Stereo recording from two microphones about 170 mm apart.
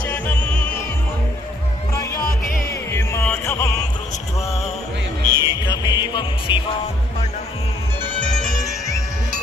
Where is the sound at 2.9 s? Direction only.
15° left (ahead or behind).